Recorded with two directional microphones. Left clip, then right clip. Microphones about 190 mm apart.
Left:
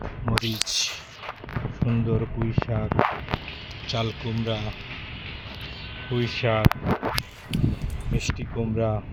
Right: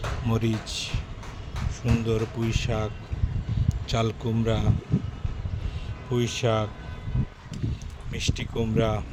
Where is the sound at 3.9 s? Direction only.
25° right (ahead or behind).